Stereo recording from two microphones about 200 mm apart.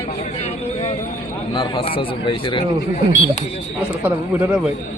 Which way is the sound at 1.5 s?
25° left (ahead or behind).